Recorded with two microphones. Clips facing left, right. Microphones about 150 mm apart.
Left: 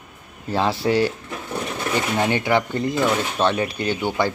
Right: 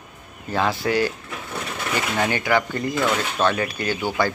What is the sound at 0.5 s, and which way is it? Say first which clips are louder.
Speech: left 2 dB; 30° left (ahead or behind).